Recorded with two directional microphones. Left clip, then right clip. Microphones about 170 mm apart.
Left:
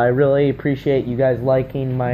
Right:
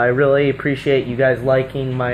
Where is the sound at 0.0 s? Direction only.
35° left (ahead or behind).